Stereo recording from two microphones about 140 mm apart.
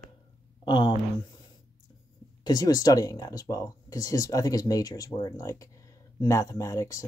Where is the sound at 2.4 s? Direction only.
30° left (ahead or behind).